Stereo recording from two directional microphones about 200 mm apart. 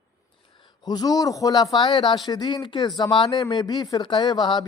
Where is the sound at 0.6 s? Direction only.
20° left (ahead or behind).